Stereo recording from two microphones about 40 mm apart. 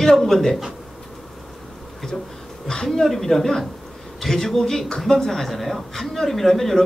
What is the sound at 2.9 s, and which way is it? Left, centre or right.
Speech, centre.